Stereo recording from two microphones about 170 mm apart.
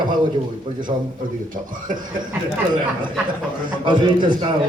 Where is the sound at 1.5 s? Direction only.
50° right (ahead or behind).